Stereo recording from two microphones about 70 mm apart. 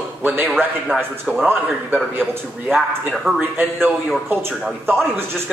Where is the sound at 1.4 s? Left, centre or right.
Right.